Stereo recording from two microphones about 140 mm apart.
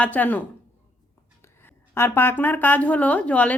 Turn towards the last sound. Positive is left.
turn(degrees=10)  # may be behind; listen again after turning